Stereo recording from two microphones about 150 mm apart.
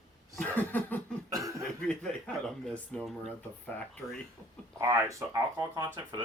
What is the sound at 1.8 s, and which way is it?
Speech, 5° left (ahead or behind).